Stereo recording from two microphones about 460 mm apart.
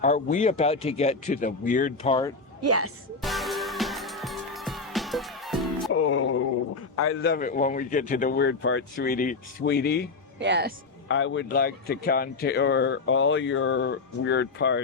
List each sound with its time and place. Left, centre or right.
0.0 s a man's voice: centre
2.6 s speech: right
3.2 s music: centre
5.9 s music: left
6.9 s speech: left
10.4 s speech: right
11.1 s speech: left